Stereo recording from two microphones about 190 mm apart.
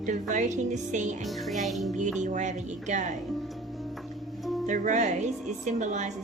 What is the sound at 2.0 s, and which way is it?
A woman's voice, 40° right (ahead or behind).